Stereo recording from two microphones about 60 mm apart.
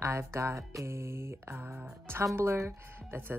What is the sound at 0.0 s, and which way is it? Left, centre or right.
Speech, right.